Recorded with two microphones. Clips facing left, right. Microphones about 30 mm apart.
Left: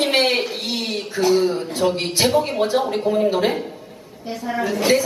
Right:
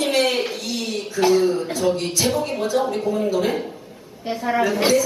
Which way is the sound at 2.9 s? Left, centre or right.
Left.